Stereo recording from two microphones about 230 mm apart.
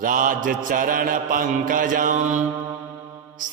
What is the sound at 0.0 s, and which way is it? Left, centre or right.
Mantra, right.